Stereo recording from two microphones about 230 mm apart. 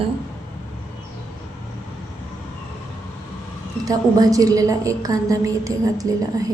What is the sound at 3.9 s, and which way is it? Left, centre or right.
A woman's voice, centre.